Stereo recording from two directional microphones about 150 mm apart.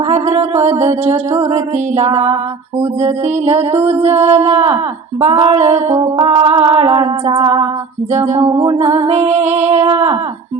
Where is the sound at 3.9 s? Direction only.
45° right (ahead or behind).